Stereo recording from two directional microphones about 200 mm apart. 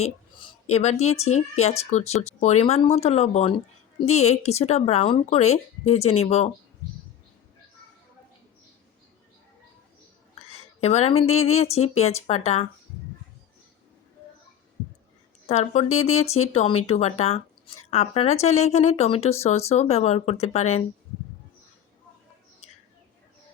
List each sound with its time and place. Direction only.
0.0 s speech: 30° left (ahead or behind)
10.5 s a woman's voice: 35° left (ahead or behind)
15.4 s speech: 30° left (ahead or behind)